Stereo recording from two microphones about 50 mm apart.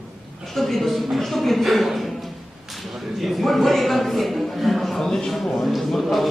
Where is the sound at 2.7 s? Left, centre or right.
Centre.